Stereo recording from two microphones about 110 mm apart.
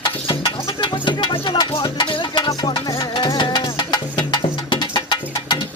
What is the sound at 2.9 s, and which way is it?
Music, 45° left (ahead or behind).